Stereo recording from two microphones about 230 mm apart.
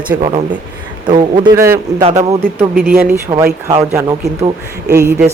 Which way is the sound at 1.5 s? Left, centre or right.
Centre.